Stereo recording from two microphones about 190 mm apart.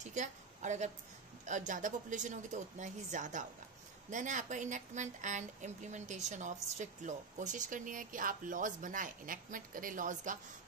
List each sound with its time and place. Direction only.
0.0 s a woman's voice: 40° right (ahead or behind)